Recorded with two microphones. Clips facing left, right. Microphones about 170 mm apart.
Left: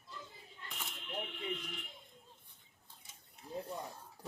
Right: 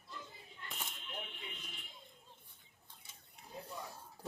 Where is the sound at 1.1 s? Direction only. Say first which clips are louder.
Left 13 dB; 80° left.